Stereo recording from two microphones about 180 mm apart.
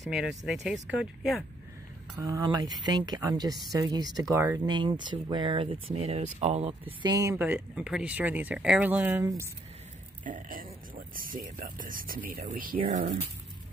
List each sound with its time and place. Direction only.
0.0 s speech: centre (ahead or behind)
2.1 s speech: 15° right (ahead or behind); by 6.7 s 35° right (ahead or behind)
7.0 s speech: 20° right (ahead or behind)
10.2 s speech: 50° right (ahead or behind)